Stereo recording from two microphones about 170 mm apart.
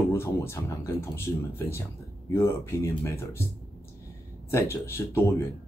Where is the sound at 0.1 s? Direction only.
15° left (ahead or behind).